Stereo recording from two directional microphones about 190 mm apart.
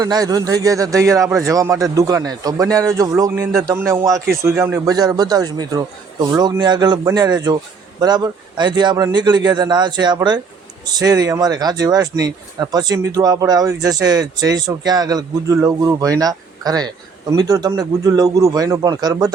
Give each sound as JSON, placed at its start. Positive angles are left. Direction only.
{"t": 0.0, "sound": "a man's voice", "side_deg": -20}